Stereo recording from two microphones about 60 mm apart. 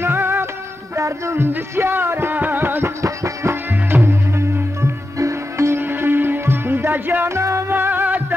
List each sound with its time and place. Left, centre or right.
0.0 s music: right
0.9 s music: right
5.8 s music: right
7.2 s music: right
7.7 s music: right